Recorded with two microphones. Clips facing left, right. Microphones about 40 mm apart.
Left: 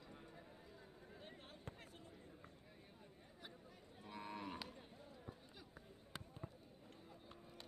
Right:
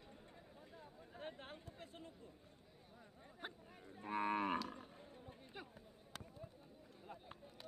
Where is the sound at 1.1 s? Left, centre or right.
Right.